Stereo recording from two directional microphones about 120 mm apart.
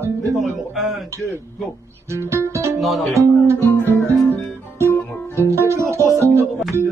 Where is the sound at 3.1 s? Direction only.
25° right (ahead or behind).